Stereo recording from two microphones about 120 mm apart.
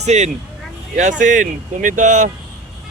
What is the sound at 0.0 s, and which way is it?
Speech, 70° right (ahead or behind).